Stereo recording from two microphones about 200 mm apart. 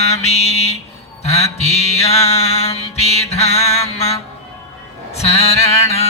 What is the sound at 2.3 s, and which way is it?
Music, 30° left (ahead or behind).